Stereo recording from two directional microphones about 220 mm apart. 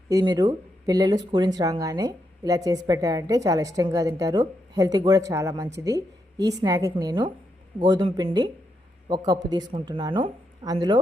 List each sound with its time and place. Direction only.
0.1 s speech: 15° right (ahead or behind)